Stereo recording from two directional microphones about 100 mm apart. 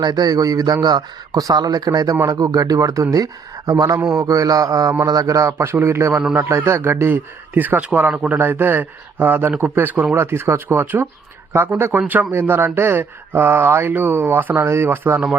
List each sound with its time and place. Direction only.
0.0 s speech: 45° right (ahead or behind); by 15.4 s 15° right (ahead or behind)